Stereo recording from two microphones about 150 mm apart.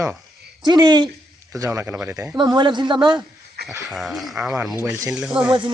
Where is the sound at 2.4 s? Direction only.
30° right (ahead or behind).